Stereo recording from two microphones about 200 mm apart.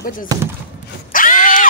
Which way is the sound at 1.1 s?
40° left (ahead or behind).